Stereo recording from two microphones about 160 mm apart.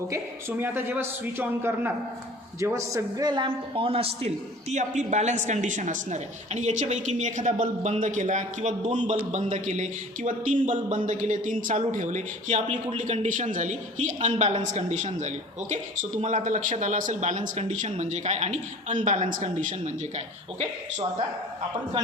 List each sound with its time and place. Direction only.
0.1 s a man's voice: 10° right (ahead or behind); by 20.7 s 45° right (ahead or behind)